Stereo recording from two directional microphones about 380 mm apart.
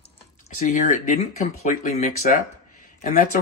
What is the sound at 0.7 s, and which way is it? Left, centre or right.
Speech, centre.